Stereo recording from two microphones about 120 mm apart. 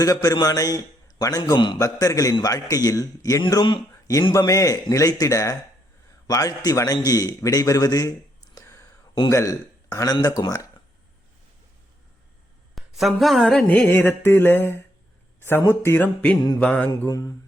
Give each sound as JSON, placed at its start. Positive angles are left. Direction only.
{"t": 0.0, "sound": "a man's voice", "side_deg": 30}
{"t": 3.5, "sound": "a man's voice", "side_deg": 40}
{"t": 8.5, "sound": "a sound", "side_deg": 25}
{"t": 9.3, "sound": "speech", "side_deg": 25}
{"t": 12.7, "sound": "a sound", "side_deg": 0}
{"t": 17.1, "sound": "speech", "side_deg": 25}